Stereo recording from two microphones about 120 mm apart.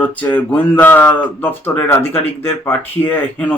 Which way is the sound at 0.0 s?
10° left (ahead or behind).